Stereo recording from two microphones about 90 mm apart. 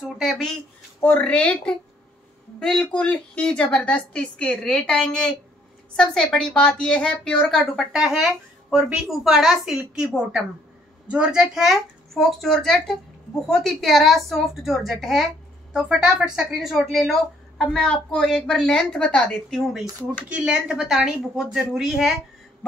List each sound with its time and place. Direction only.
0.2 s speech: centre (ahead or behind)
1.0 s a woman's voice: 15° left (ahead or behind)
7.7 s speech: 5° right (ahead or behind); by 19.6 s 10° left (ahead or behind)
20.2 s a woman's voice: 15° right (ahead or behind)